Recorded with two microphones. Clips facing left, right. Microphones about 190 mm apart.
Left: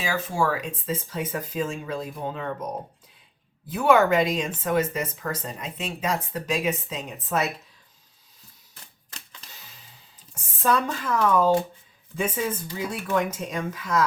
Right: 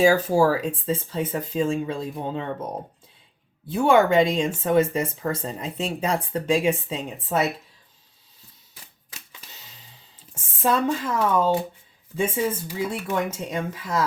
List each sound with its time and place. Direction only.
0.0 s speech: 40° right (ahead or behind)
3.7 s speech: 30° right (ahead or behind)
10.3 s speech: 25° right (ahead or behind)